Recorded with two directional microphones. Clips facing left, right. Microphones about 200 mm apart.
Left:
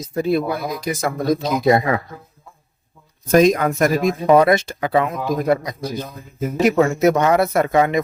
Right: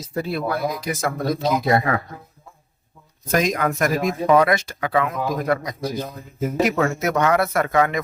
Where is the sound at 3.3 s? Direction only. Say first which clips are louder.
Left 7 dB; 30° left (ahead or behind).